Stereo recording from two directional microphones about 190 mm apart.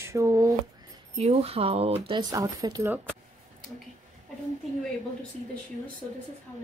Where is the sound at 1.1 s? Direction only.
35° right (ahead or behind); by 3.1 s 10° right (ahead or behind).